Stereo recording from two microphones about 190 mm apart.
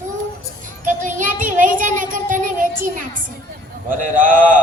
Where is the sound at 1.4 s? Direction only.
45° right (ahead or behind).